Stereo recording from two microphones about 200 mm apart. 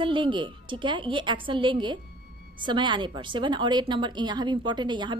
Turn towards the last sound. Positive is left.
turn(degrees=-20)  # may be behind; listen again after turning